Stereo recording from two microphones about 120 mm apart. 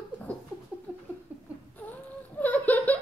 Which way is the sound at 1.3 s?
15° right (ahead or behind).